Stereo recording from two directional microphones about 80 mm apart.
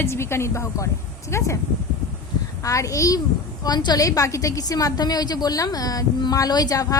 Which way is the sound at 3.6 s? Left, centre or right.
Left.